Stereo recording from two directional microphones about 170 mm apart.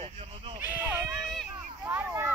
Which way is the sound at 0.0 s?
30° right (ahead or behind).